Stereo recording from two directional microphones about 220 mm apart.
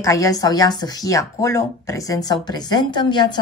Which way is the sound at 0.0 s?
15° left (ahead or behind).